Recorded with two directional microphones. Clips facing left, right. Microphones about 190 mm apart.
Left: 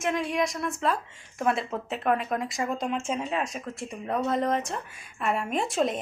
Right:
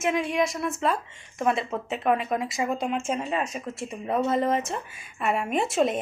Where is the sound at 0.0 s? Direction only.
Centre (ahead or behind).